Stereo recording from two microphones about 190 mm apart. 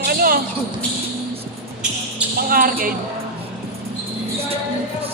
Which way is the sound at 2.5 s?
50° right (ahead or behind).